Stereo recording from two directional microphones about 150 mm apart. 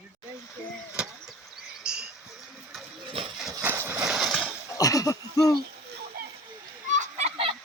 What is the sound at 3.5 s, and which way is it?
Horse, 20° right (ahead or behind).